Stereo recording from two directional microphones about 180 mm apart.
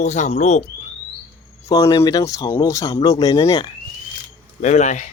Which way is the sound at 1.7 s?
20° left (ahead or behind).